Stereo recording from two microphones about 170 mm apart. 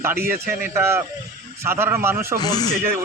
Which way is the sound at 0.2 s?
60° right (ahead or behind).